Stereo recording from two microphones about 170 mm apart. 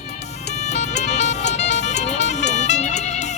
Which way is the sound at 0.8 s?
40° left (ahead or behind).